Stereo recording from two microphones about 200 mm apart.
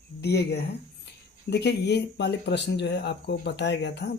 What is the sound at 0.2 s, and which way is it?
Speech, 55° left (ahead or behind).